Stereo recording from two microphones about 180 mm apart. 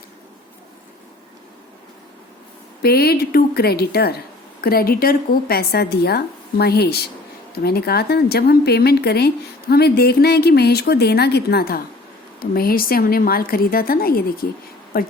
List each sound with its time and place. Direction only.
2.8 s a woman's voice: 60° left (ahead or behind)